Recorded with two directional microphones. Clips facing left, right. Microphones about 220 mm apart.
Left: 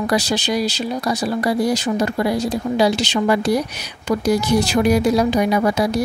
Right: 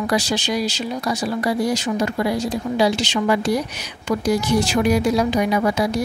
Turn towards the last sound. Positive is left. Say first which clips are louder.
# left 2 dB
turn(degrees=35)  # may be behind; listen again after turning